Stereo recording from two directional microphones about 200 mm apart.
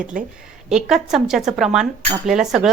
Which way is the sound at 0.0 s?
40° right (ahead or behind).